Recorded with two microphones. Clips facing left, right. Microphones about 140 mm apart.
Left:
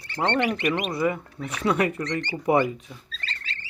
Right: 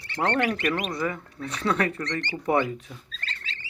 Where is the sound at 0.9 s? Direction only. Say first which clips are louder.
Left 4 dB; 20° left (ahead or behind).